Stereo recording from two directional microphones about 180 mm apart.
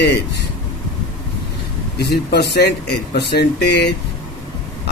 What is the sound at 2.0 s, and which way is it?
Speech, 65° left (ahead or behind).